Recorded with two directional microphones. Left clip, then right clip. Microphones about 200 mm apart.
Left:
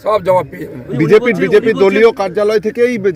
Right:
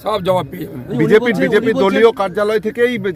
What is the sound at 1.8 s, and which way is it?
Speech, 30° left (ahead or behind).